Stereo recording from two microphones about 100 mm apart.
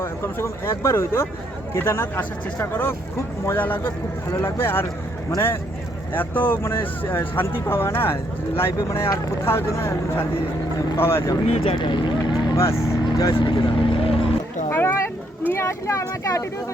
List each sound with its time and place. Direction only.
0.0 s speech: 25° left (ahead or behind)
6.1 s speech: 20° left (ahead or behind)
11.4 s speech: 80° left
11.8 s speech: 50° left (ahead or behind)
12.5 s speech: 30° left (ahead or behind)
13.3 s speech: 55° left (ahead or behind)
14.7 s a sound: 20° left (ahead or behind)